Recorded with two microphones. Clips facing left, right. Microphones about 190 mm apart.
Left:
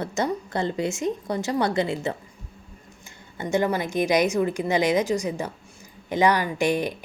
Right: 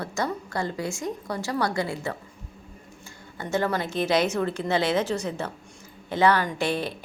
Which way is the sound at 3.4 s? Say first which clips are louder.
Left 3 dB; 15° left (ahead or behind).